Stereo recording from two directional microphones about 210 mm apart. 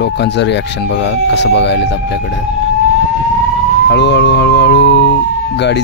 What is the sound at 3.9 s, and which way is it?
Speech, 55° left (ahead or behind).